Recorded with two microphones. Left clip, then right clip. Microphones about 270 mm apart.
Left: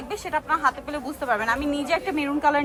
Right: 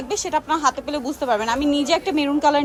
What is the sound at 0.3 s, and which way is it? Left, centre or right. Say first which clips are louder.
A woman's voice: right 2 dB; centre.